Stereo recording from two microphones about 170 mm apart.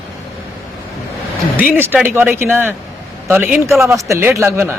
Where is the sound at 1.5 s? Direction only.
10° right (ahead or behind).